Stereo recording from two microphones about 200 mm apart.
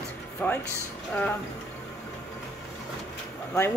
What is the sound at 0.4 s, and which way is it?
Speech, 10° left (ahead or behind).